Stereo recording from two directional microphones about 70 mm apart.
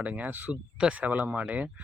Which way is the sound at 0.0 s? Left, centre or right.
Right.